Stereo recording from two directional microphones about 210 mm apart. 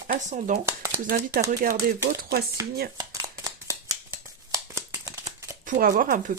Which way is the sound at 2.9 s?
15° right (ahead or behind).